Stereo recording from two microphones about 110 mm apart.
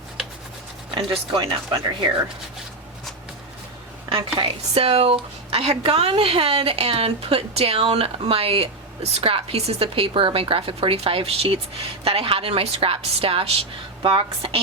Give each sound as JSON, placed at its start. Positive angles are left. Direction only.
{"t": 0.9, "sound": "speech", "side_deg": -55}
{"t": 4.1, "sound": "speech", "side_deg": -55}